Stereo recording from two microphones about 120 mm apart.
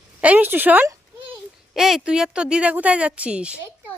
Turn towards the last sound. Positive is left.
turn(degrees=-10)  # may be behind; listen again after turning